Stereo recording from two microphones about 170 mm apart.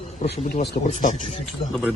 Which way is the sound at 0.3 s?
65° left (ahead or behind).